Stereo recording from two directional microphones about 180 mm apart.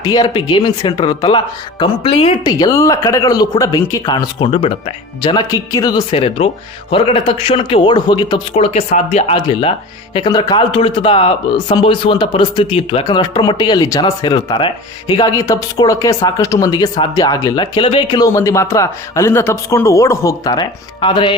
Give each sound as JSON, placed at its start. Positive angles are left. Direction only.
{"t": 0.0, "sound": "a man's voice", "side_deg": 25}
{"t": 2.4, "sound": "a man's voice", "side_deg": 20}